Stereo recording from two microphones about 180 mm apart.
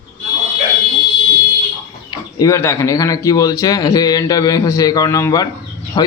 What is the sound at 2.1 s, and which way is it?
Speech, 20° left (ahead or behind).